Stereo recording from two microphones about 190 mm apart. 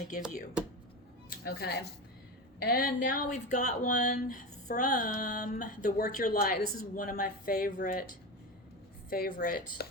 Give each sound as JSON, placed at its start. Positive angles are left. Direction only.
{"t": 1.5, "sound": "speech", "side_deg": 55}
{"t": 9.0, "sound": "speech", "side_deg": 50}